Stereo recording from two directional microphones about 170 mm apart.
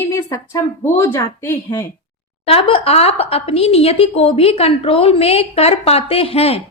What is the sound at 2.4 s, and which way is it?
A woman's voice, 35° left (ahead or behind).